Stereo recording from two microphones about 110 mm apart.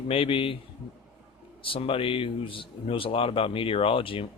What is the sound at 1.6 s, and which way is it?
A man's voice, 55° left (ahead or behind).